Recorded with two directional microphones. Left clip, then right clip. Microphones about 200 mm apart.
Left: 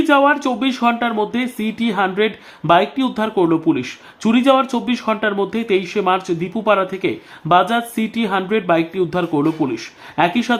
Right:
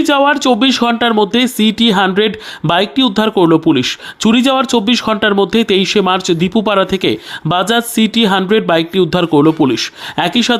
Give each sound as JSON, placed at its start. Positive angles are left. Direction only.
{"t": 0.0, "sound": "speech", "side_deg": -40}